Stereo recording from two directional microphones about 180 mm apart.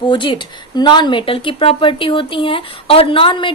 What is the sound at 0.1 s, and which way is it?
Speech, 25° left (ahead or behind).